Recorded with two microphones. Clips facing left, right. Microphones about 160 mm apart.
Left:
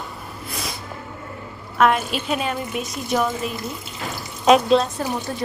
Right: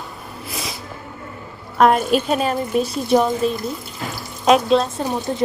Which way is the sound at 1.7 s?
40° right (ahead or behind).